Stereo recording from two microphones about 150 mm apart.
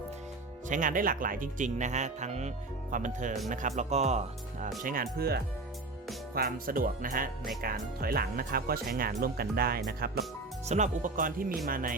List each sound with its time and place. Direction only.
0.7 s speech: 60° right (ahead or behind)
4.8 s speech: 65° right (ahead or behind)
6.3 s speech: 80° right
7.6 s speech: 80° right
10.7 s speech: 55° right (ahead or behind)